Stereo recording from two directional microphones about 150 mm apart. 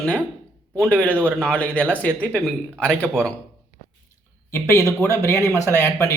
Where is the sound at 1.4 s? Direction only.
5° left (ahead or behind).